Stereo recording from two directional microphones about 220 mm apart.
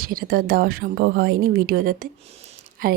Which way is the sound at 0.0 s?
40° right (ahead or behind).